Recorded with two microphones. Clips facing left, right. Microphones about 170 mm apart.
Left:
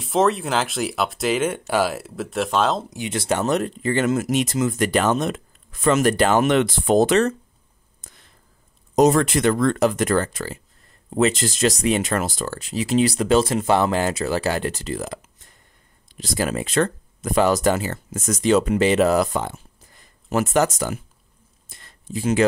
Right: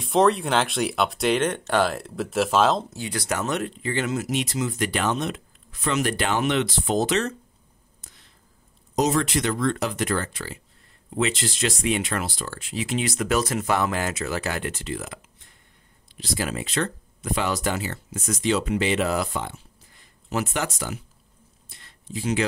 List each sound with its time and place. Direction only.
0.0 s speech: centre (ahead or behind)
2.9 s speech: 20° left (ahead or behind); by 7.3 s 50° left (ahead or behind)
8.9 s speech: 50° left (ahead or behind)
21.6 s a sound: 45° left (ahead or behind)